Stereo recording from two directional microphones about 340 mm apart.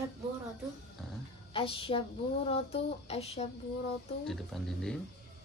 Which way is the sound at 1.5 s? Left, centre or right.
Centre.